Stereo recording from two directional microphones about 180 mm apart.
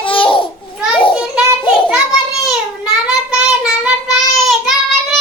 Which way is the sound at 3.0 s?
5° right (ahead or behind).